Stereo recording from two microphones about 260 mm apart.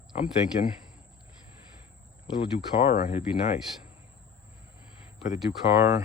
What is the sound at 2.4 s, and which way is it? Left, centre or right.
Speech, left.